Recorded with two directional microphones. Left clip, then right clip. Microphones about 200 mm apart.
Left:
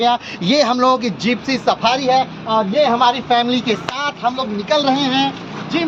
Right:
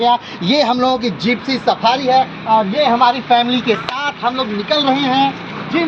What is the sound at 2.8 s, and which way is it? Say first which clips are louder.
Speech: right 2 dB; 15° left (ahead or behind).